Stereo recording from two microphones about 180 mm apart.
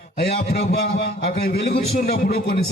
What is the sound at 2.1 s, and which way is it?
Speech, 55° left (ahead or behind).